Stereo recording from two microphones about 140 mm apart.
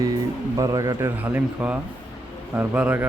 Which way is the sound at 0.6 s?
25° right (ahead or behind).